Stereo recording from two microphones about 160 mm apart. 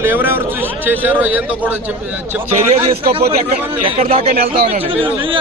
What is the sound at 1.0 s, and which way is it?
Speech, 10° right (ahead or behind).